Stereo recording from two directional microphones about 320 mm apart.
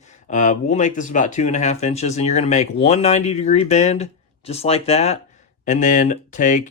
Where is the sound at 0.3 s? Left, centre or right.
Left.